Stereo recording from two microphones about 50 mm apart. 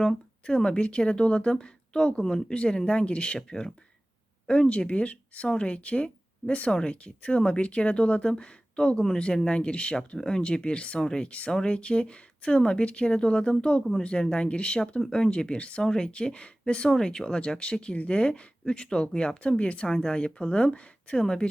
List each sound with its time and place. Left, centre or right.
0.0 s speech: centre